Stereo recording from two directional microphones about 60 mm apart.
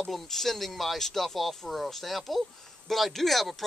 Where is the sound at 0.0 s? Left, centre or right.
Centre.